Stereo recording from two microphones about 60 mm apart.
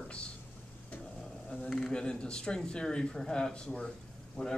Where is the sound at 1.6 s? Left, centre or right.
Centre.